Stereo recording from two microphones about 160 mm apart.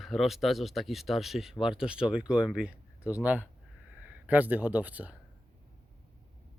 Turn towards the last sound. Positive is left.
turn(degrees=-10)  # may be behind; listen again after turning